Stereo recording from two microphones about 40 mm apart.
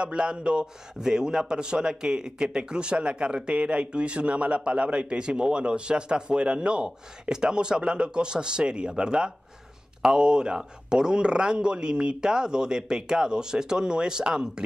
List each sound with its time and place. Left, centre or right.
0.0 s a man's voice: right